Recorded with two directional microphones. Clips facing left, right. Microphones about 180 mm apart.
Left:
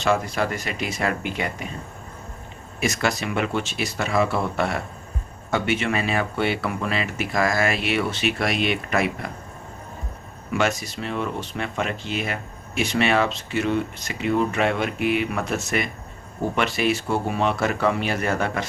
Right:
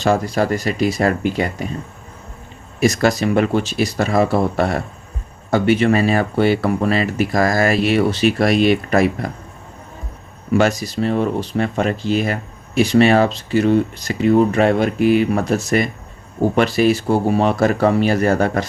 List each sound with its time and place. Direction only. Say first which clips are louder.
0.0 s speech: right 5 dB; 35° right (ahead or behind)
2.8 s speech: right 8 dB; 35° right (ahead or behind)
10.5 s speech: right 7 dB; 35° right (ahead or behind)